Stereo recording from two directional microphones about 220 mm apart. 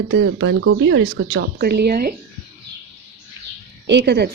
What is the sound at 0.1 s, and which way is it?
Speech, 60° right (ahead or behind).